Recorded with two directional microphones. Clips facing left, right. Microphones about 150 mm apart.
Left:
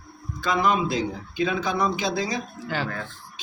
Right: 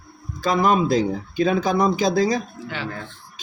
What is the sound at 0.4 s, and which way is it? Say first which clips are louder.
Speech: right 4 dB; 40° right (ahead or behind).